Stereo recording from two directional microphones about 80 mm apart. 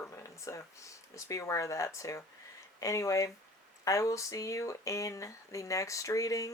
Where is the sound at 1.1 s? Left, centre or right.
Left.